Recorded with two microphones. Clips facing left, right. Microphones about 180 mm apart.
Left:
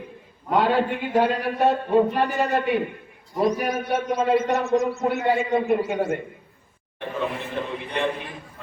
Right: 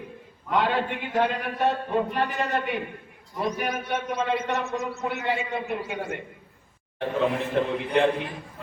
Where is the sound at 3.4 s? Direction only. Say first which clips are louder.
Left 6 dB; 40° left (ahead or behind).